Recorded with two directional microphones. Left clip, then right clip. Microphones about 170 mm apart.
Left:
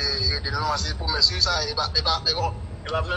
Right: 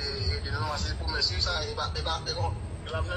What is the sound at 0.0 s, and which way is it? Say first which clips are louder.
Speech: left 9 dB; 55° left (ahead or behind).